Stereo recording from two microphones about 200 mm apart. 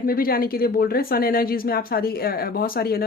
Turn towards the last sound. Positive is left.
turn(degrees=50)  # may be behind; listen again after turning